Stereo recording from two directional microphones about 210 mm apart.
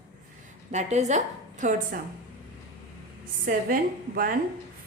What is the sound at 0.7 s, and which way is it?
A woman's voice, 35° right (ahead or behind).